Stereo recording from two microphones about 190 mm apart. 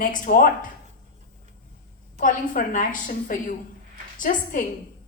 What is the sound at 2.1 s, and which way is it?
A woman's voice, 45° left (ahead or behind).